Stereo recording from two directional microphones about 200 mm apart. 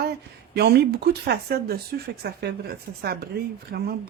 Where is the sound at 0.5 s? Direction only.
55° right (ahead or behind).